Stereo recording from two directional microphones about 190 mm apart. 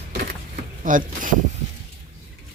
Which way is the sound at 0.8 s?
45° right (ahead or behind).